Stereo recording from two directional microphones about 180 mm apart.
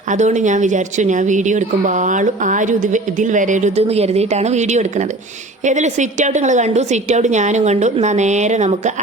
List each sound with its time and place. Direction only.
0.1 s a woman's voice: 40° right (ahead or behind)